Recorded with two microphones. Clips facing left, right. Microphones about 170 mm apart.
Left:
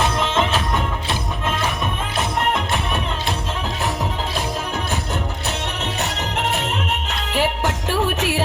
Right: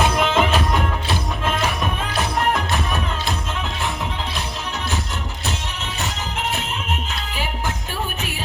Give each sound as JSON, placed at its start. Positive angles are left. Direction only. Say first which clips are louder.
{"t": 0.0, "sound": "music", "louder": "right 2 dB", "side_deg": -15}
{"t": 5.8, "sound": "music", "louder": "left 4 dB", "side_deg": 70}